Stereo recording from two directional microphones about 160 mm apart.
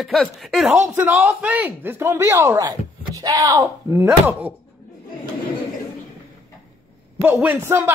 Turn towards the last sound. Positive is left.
turn(degrees=-15)  # may be behind; listen again after turning